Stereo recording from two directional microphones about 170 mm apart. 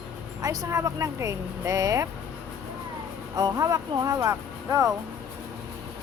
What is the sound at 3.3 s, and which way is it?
Speech, 20° right (ahead or behind).